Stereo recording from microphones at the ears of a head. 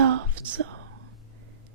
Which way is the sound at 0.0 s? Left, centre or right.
Right.